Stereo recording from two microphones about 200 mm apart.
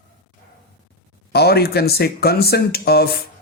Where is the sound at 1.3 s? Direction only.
55° left (ahead or behind).